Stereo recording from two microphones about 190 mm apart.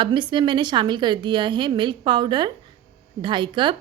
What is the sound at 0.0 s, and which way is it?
A woman's voice, 25° right (ahead or behind).